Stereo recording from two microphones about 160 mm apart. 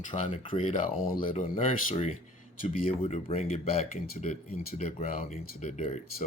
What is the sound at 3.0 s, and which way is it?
Speech, 40° left (ahead or behind).